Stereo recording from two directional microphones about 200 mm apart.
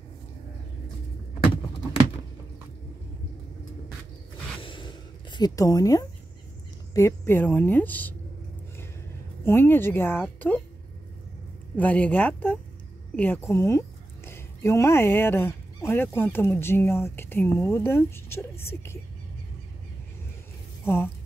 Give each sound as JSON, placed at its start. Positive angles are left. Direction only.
{"t": 4.6, "sound": "a sound", "side_deg": 25}
{"t": 6.9, "sound": "a woman's voice", "side_deg": 15}
{"t": 9.4, "sound": "a woman's voice", "side_deg": 10}
{"t": 11.7, "sound": "a woman's voice", "side_deg": 10}
{"t": 20.8, "sound": "speech", "side_deg": 10}